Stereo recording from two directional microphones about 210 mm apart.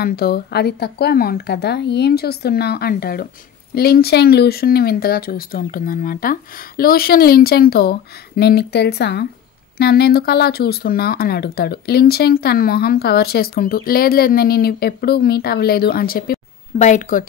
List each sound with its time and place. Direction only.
0.0 s speech: 45° left (ahead or behind)